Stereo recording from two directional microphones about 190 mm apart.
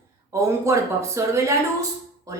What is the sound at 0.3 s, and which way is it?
Speech, 15° right (ahead or behind).